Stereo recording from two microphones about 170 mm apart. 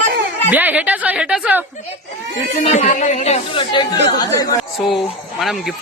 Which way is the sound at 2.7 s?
40° left (ahead or behind).